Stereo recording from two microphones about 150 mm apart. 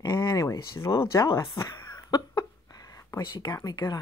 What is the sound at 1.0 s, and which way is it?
Speech, 20° left (ahead or behind).